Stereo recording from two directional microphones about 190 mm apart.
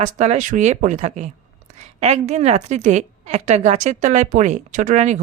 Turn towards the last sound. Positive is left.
turn(degrees=-40)  # may be behind; listen again after turning